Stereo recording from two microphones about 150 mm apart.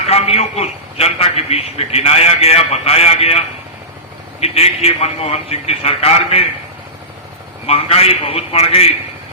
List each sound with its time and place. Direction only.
0.0 s a man's voice: 40° left (ahead or behind)
7.7 s a man's voice: 40° left (ahead or behind)